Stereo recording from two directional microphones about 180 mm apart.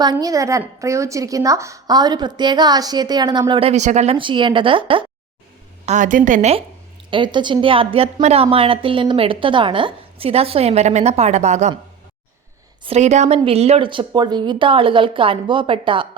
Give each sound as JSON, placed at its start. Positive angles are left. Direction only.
{"t": 0.0, "sound": "a woman's voice", "side_deg": -20}
{"t": 5.8, "sound": "a woman's voice", "side_deg": -40}
{"t": 7.1, "sound": "a woman's voice", "side_deg": -25}
{"t": 12.8, "sound": "a woman's voice", "side_deg": -35}